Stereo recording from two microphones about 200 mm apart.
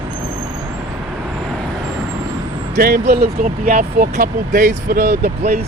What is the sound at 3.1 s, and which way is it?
Speech, 35° right (ahead or behind).